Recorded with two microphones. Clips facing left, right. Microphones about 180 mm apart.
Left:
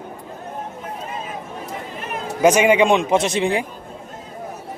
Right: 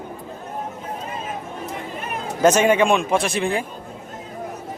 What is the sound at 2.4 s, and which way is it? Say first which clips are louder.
Speech: left 1 dB; 10° left (ahead or behind).